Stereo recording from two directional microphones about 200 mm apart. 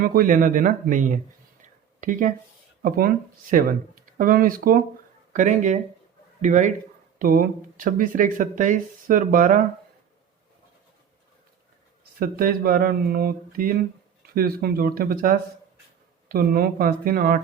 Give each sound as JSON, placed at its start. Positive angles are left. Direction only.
{"t": 0.0, "sound": "speech", "side_deg": -45}
{"t": 1.6, "sound": "a sound", "side_deg": -40}
{"t": 2.8, "sound": "speech", "side_deg": -45}
{"t": 12.2, "sound": "speech", "side_deg": -45}